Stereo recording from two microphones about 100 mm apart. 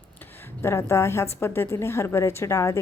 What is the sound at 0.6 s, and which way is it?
Speech, 30° left (ahead or behind).